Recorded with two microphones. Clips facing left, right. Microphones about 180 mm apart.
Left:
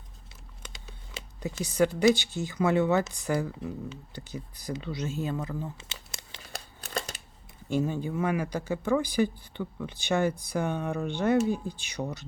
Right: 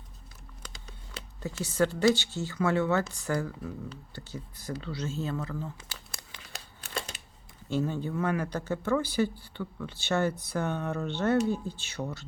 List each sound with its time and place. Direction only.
1.4 s speech: 15° left (ahead or behind)
6.5 s crumpling: 40° left (ahead or behind)
7.7 s speech: 15° left (ahead or behind)